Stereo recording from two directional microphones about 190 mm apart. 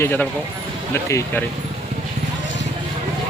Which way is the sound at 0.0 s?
10° left (ahead or behind).